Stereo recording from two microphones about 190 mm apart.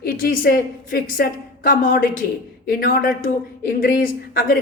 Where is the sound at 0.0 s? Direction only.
50° left (ahead or behind).